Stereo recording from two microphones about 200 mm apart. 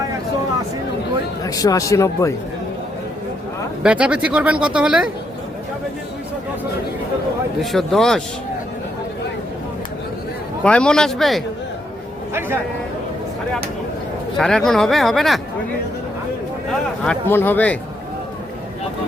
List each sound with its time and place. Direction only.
1.5 s speech: 20° left (ahead or behind)
3.8 s speech: 5° right (ahead or behind)
7.6 s speech: centre (ahead or behind)
10.6 s speech: 5° left (ahead or behind)
12.3 s a man's voice: 10° right (ahead or behind)
14.3 s speech: centre (ahead or behind)
17.0 s speech: 10° left (ahead or behind)